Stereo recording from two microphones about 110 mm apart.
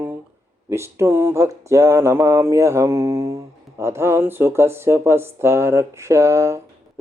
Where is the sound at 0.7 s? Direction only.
25° right (ahead or behind).